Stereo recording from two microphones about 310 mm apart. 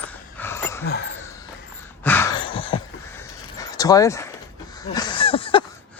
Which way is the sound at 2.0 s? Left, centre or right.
Centre.